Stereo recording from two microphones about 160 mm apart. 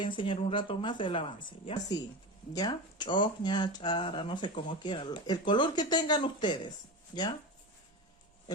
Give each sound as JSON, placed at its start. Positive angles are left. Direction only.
{"t": 0.0, "sound": "speech", "side_deg": 30}